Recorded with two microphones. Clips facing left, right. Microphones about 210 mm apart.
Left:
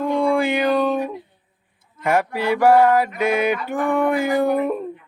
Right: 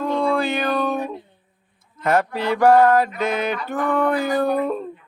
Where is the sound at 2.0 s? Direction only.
10° left (ahead or behind).